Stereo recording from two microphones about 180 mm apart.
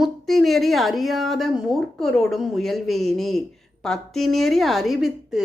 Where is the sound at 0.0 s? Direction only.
Centre (ahead or behind).